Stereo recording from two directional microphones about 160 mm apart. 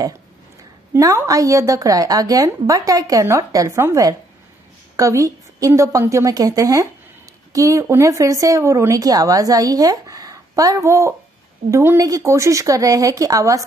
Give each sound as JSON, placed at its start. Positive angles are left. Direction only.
{"t": 0.9, "sound": "speech", "side_deg": -20}